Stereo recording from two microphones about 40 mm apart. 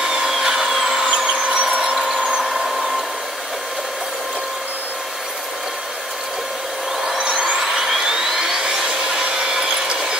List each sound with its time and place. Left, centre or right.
0.0 s tools: centre
1.0 s vehicle: right
1.7 s tools: right
2.3 s tools: centre
7.2 s a sound: centre